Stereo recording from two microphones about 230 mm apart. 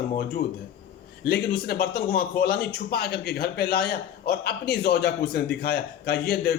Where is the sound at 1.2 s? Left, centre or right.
Left.